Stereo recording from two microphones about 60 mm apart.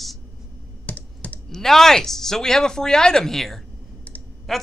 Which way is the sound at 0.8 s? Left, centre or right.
Left.